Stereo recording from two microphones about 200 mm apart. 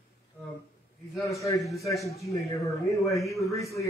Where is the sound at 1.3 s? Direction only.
15° left (ahead or behind).